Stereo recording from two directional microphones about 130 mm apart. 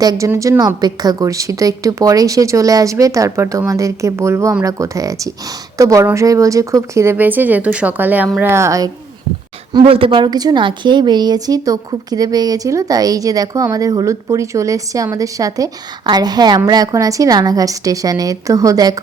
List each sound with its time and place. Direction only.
0.0 s speech: 30° right (ahead or behind)
9.8 s speech: 45° right (ahead or behind); by 18.9 s 30° right (ahead or behind)